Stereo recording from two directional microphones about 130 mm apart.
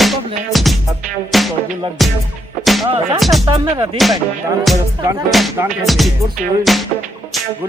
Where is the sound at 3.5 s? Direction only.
40° right (ahead or behind).